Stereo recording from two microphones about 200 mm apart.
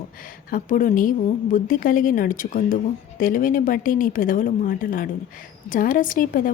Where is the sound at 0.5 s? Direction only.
40° left (ahead or behind).